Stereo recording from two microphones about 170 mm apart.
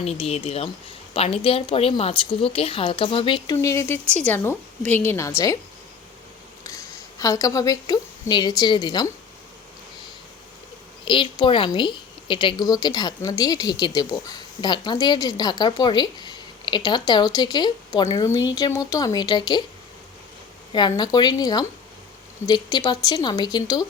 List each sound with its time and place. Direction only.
0.0 s a woman's voice: 35° left (ahead or behind); by 5.3 s 15° left (ahead or behind)
7.2 s a woman's voice: 20° left (ahead or behind)
11.0 s a woman's voice: 30° left (ahead or behind)
20.7 s a woman's voice: 25° left (ahead or behind)